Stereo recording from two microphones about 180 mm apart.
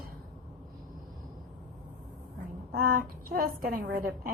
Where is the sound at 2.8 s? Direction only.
55° right (ahead or behind).